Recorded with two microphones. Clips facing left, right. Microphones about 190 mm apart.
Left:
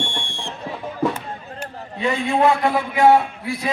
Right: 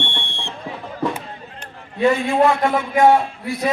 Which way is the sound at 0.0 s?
65° right (ahead or behind).